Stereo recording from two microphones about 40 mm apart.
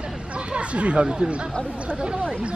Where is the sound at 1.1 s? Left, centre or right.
Right.